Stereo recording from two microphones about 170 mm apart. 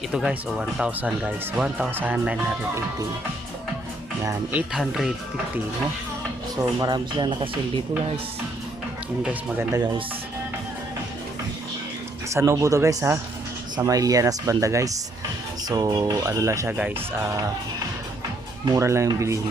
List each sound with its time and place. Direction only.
0.1 s speech: 5° right (ahead or behind)
4.2 s speech: 15° right (ahead or behind)
4.7 s speech: 5° right (ahead or behind)
6.7 s speech: 25° right (ahead or behind)
9.2 s speech: 15° right (ahead or behind)
12.3 s speech: 15° right (ahead or behind)
18.6 s speech: 20° right (ahead or behind)